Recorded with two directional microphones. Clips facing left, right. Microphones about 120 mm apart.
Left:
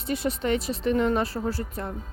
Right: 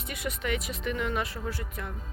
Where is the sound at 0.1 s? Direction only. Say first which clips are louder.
Left 7 dB; 30° left (ahead or behind).